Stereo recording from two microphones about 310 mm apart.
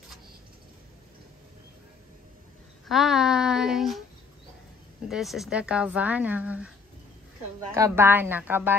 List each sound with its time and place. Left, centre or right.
2.9 s speech: centre
5.0 s speech: centre
7.7 s a woman's voice: centre